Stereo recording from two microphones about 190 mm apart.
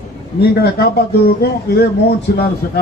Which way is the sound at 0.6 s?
55° left (ahead or behind).